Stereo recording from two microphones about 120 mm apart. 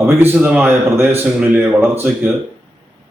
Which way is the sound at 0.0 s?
20° right (ahead or behind).